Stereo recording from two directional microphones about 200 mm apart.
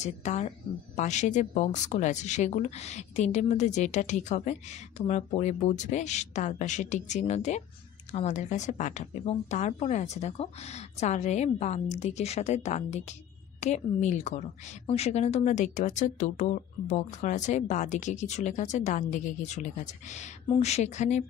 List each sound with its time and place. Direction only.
0.0 s a woman's voice: 35° left (ahead or behind)